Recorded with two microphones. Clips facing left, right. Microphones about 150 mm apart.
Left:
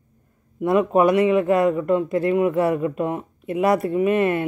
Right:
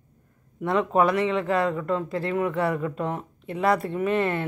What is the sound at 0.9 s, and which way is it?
A man's voice, 20° left (ahead or behind).